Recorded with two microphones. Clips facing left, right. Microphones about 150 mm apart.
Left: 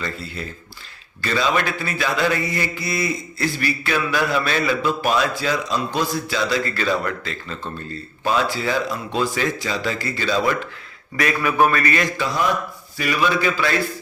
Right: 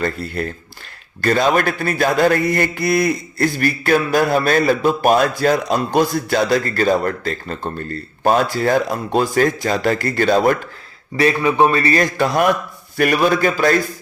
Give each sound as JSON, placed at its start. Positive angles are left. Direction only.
{"t": 0.0, "sound": "speech", "side_deg": -55}
{"t": 11.2, "sound": "a man's voice", "side_deg": -30}
{"t": 12.1, "sound": "a man's voice", "side_deg": -60}